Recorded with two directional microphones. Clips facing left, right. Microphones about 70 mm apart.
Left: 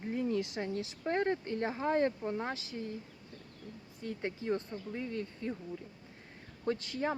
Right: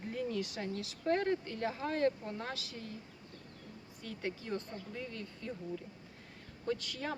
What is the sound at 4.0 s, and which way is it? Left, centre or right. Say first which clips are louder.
Speech: left 3 dB; left.